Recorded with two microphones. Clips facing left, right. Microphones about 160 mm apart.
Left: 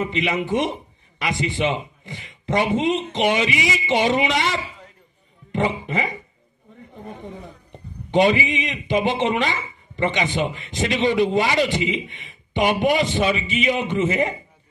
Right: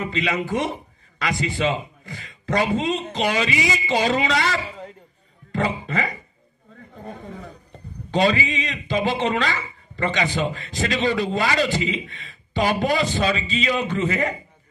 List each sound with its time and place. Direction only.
0.0 s a man's voice: 20° left (ahead or behind)
7.2 s a man's voice: 20° left (ahead or behind)